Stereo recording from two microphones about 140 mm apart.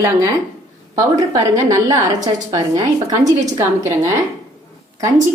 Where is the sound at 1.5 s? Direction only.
25° right (ahead or behind).